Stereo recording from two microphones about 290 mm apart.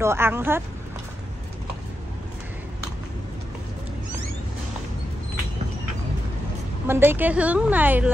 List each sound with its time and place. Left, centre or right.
0.0 s speech: centre
6.9 s speech: centre